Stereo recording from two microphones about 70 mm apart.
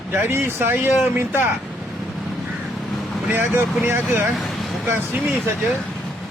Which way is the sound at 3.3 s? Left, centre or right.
Right.